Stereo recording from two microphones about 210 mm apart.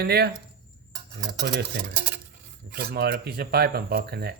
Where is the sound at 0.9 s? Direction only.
30° right (ahead or behind).